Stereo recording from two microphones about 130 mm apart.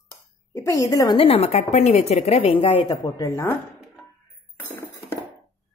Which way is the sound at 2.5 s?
45° left (ahead or behind).